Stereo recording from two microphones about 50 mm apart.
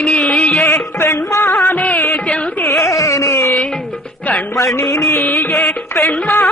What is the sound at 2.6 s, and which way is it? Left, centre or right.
Carnatic music, left.